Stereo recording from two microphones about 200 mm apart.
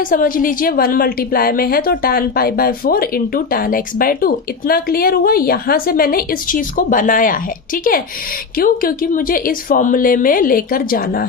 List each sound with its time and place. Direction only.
0.0 s a woman's voice: 45° left (ahead or behind)